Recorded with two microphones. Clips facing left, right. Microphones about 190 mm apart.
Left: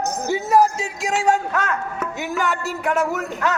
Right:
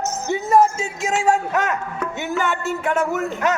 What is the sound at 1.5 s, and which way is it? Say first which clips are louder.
Speech: right 2 dB; 20° right (ahead or behind).